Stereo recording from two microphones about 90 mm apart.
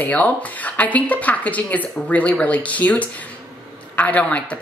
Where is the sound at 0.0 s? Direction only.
15° left (ahead or behind).